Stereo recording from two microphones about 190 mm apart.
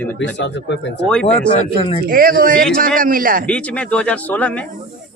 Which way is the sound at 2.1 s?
50° right (ahead or behind).